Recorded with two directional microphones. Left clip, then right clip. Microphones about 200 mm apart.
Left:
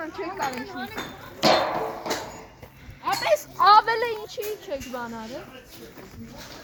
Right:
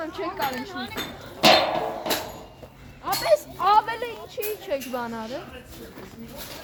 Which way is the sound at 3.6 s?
25° left (ahead or behind).